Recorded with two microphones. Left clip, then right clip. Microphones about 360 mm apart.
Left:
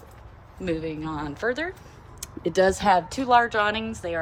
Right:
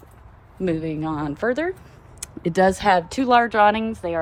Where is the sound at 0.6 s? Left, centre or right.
Centre.